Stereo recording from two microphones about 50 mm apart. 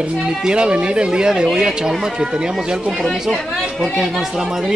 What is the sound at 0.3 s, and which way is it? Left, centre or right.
Speech, centre.